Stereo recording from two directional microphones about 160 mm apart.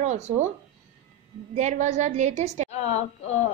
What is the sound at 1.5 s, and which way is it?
A woman's voice, 50° right (ahead or behind).